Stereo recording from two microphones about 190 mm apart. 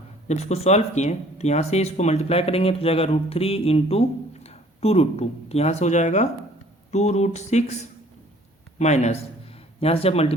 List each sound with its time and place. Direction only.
0.3 s speech: 35° left (ahead or behind)
8.8 s speech: 35° left (ahead or behind)